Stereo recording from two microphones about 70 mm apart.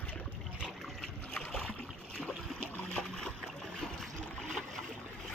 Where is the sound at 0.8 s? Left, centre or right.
Centre.